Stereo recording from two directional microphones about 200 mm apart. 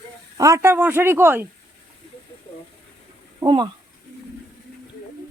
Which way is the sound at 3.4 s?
25° right (ahead or behind).